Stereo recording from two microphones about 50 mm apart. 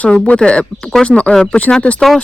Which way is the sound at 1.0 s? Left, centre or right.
Centre.